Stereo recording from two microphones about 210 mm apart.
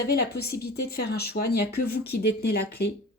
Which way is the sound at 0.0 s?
50° left (ahead or behind).